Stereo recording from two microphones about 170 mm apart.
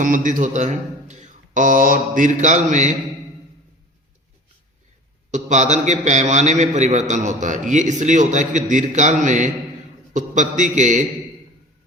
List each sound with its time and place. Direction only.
0.0 s a man's voice: 50° right (ahead or behind)
5.3 s a man's voice: 45° right (ahead or behind)